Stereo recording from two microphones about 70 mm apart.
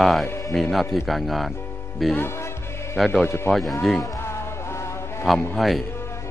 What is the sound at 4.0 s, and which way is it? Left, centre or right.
Music, left.